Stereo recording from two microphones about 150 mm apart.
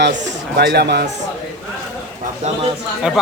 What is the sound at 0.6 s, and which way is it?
Speech, 90° right.